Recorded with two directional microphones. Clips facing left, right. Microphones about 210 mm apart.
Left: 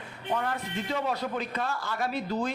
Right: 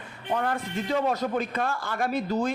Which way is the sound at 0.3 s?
45° right (ahead or behind).